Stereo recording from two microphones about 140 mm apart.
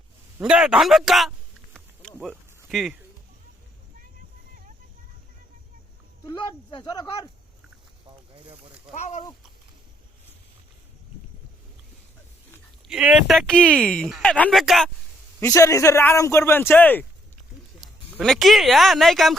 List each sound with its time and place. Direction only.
0.3 s speech: 5° right (ahead or behind)
1.7 s insect: 5° left (ahead or behind)
2.1 s speech: 10° right (ahead or behind)
2.6 s speech: centre (ahead or behind)
6.2 s speech: 35° left (ahead or behind)
9.0 s speech: 55° left (ahead or behind)
12.9 s speech: 5° right (ahead or behind); by 14.5 s 10° left (ahead or behind)
14.5 s speech: centre (ahead or behind)
15.4 s a man's voice: 20° left (ahead or behind)
17.7 s speech: centre (ahead or behind)